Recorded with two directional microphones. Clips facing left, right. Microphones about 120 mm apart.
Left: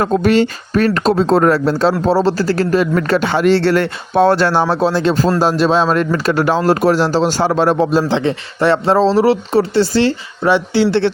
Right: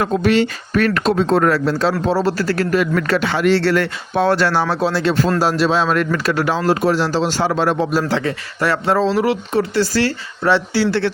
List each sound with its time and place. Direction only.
0.0 s speech: 45° left (ahead or behind)
7.9 s speech: 25° left (ahead or behind)